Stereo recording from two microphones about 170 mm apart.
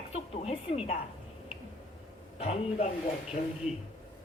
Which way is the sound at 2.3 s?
35° left (ahead or behind).